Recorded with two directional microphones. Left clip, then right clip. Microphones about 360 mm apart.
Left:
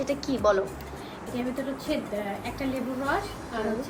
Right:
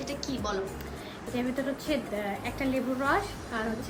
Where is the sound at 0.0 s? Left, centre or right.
Centre.